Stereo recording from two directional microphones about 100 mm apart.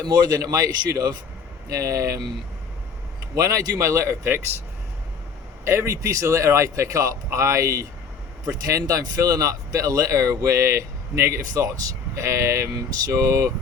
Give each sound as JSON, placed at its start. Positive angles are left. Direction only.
{"t": 0.0, "sound": "speech", "side_deg": -40}
{"t": 3.3, "sound": "speech", "side_deg": -35}
{"t": 5.6, "sound": "speech", "side_deg": -25}